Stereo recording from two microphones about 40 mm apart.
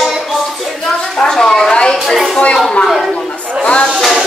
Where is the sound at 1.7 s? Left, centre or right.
Left.